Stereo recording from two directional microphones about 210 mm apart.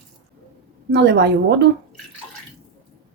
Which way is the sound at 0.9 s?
55° right (ahead or behind).